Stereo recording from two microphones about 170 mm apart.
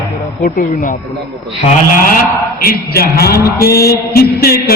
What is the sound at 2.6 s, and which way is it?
Speech, 65° left (ahead or behind).